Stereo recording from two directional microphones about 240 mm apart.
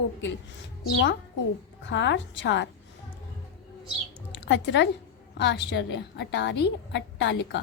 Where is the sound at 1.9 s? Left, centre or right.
Left.